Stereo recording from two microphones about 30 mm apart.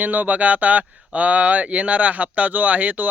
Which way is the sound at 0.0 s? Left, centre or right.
Right.